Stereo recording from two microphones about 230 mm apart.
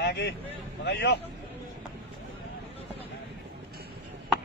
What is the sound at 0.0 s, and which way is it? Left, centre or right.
Vehicle, left.